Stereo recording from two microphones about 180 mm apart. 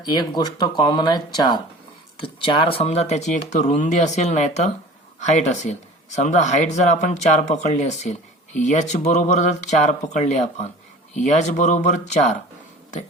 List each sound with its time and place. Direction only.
0.0 s speech: 25° left (ahead or behind); by 12.3 s 40° left (ahead or behind)